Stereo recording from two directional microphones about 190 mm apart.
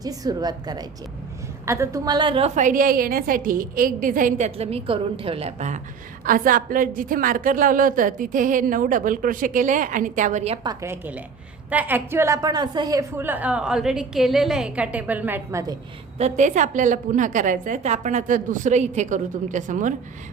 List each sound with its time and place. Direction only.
0.0 s a woman's voice: 20° right (ahead or behind)
10.7 s a woman's voice: 15° right (ahead or behind)
16.1 s a woman's voice: 35° right (ahead or behind)